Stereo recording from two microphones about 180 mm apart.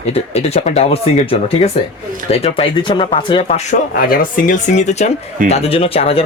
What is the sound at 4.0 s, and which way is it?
Speech, 50° left (ahead or behind).